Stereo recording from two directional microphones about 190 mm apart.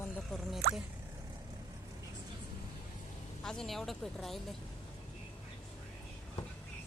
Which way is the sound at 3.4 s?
Centre (ahead or behind).